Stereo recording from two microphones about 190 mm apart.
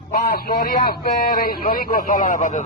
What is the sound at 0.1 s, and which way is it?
A man's voice, 55° left (ahead or behind).